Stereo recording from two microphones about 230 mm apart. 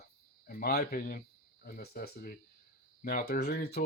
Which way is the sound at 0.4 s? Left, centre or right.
Left.